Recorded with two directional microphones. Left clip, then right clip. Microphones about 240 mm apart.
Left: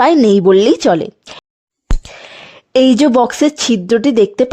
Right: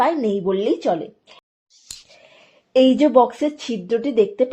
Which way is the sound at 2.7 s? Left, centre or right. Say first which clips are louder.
Left 4 dB; left.